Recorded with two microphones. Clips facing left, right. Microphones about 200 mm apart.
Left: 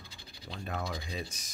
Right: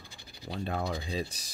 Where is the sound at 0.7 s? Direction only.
30° right (ahead or behind).